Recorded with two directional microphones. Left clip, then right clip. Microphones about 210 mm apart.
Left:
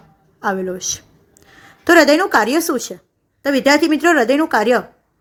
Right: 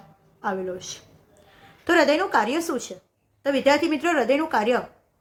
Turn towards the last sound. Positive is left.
turn(degrees=40)  # may be behind; listen again after turning